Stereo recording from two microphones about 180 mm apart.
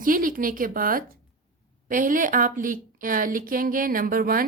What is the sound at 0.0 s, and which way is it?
A woman's voice, 50° right (ahead or behind).